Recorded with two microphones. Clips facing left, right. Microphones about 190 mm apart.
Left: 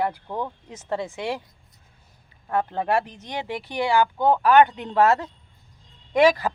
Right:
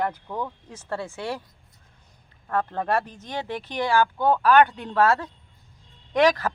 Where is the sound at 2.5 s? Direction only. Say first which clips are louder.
Left 1 dB; 15° left (ahead or behind).